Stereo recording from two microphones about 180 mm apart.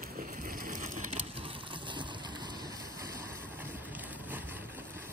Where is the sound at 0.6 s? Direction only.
45° right (ahead or behind).